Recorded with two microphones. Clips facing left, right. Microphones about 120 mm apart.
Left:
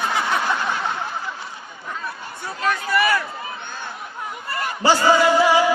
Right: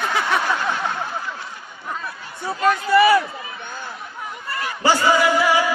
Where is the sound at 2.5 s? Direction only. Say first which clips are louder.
Right 5 dB; 30° right (ahead or behind).